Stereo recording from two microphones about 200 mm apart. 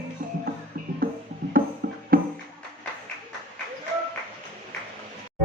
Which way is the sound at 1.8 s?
50° right (ahead or behind).